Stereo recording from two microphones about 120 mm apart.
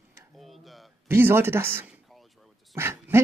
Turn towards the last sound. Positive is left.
turn(degrees=-20)  # may be behind; listen again after turning